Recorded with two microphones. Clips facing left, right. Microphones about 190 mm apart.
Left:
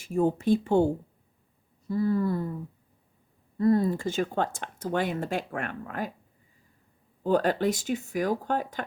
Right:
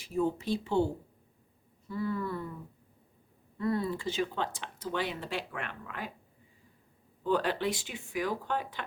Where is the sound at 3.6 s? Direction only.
40° left (ahead or behind).